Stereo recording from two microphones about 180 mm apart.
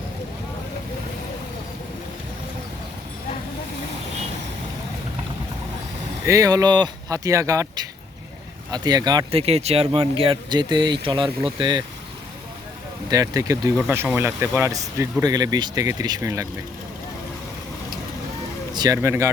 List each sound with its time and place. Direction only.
6.2 s speech: 20° right (ahead or behind)
9.5 s speech: 35° right (ahead or behind)
13.1 s speech: 20° right (ahead or behind)
18.7 s speech: 20° right (ahead or behind)